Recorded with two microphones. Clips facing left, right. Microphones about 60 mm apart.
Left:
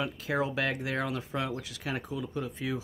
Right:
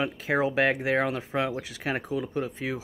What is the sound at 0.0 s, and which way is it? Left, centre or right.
Speech, right.